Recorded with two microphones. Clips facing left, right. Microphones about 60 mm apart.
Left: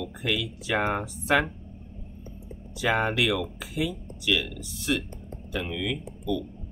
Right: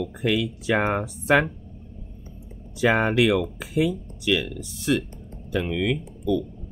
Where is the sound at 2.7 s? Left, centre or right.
Right.